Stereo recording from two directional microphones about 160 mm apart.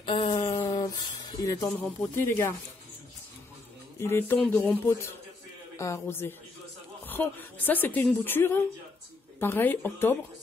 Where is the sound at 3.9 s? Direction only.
15° left (ahead or behind).